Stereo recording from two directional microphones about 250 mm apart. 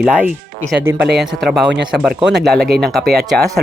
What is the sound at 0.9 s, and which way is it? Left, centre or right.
Speech, right.